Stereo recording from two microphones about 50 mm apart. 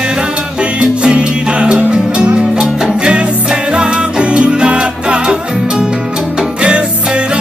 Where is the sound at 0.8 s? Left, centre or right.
Right.